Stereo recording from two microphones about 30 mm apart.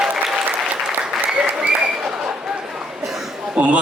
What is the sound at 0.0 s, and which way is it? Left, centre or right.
Applause, centre.